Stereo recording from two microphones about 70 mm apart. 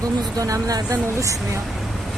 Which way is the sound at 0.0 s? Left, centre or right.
Right.